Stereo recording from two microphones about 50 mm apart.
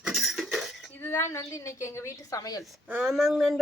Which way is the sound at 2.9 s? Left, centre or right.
Centre.